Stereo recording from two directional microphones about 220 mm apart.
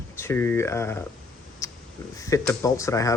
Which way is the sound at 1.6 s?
15° left (ahead or behind).